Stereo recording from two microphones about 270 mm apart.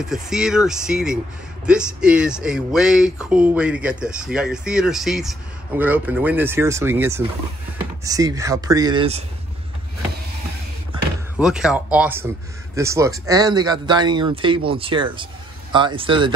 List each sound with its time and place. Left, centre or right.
0.0 s speech: centre
11.3 s speech: centre